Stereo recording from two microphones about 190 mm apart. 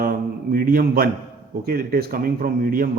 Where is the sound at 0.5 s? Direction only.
50° right (ahead or behind).